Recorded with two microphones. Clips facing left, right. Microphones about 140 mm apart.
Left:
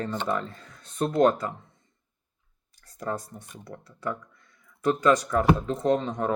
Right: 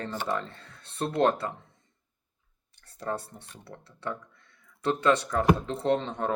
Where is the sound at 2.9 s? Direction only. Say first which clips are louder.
Left 1 dB; 30° right (ahead or behind).